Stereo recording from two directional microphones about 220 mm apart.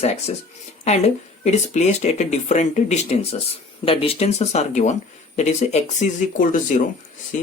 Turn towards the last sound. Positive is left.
turn(degrees=35)  # may be behind; listen again after turning